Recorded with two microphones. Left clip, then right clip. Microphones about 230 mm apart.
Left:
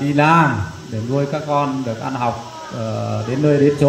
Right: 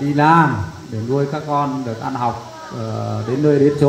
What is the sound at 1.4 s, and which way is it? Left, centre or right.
Speech, left.